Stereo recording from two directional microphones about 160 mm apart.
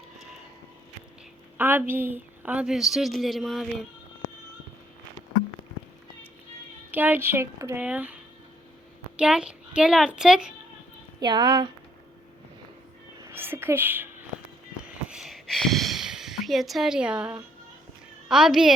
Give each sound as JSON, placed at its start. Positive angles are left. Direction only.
{"t": 1.5, "sound": "a woman's voice", "side_deg": -10}
{"t": 6.9, "sound": "speech", "side_deg": -10}
{"t": 9.1, "sound": "a woman's voice", "side_deg": -5}
{"t": 11.2, "sound": "a woman's voice", "side_deg": -30}
{"t": 13.2, "sound": "speech", "side_deg": -15}
{"t": 14.8, "sound": "a sound", "side_deg": -5}
{"t": 18.3, "sound": "a woman's voice", "side_deg": -5}